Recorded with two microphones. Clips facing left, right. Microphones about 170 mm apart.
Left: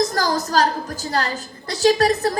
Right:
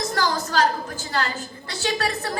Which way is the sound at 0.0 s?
35° left (ahead or behind).